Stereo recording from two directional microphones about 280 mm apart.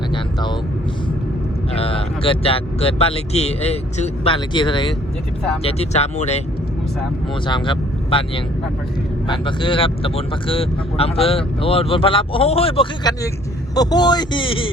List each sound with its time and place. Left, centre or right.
1.7 s speech: left
7.4 s speech: centre
9.2 s a man's voice: centre